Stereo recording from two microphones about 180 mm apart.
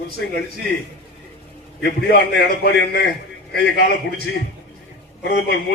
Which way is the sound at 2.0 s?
65° left (ahead or behind).